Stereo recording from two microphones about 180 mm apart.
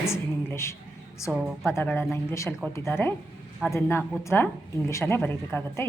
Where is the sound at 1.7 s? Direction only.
10° left (ahead or behind).